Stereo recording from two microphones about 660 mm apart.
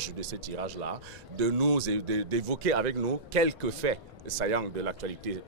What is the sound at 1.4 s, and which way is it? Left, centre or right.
Speech, right.